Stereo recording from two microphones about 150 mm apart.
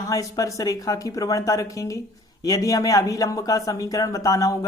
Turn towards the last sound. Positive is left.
turn(degrees=20)  # may be behind; listen again after turning